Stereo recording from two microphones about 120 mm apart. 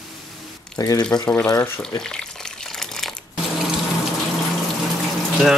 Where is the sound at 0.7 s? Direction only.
30° left (ahead or behind).